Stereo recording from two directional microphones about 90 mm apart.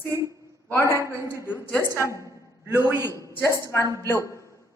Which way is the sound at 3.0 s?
30° left (ahead or behind).